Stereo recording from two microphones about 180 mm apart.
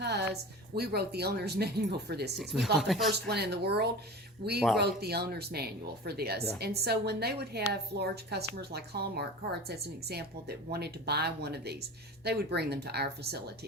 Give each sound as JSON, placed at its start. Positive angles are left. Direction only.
{"t": 0.0, "sound": "a sound", "side_deg": -65}
{"t": 0.8, "sound": "a woman's voice", "side_deg": -60}
{"t": 2.3, "sound": "speech", "side_deg": 0}
{"t": 3.1, "sound": "a woman's voice", "side_deg": -60}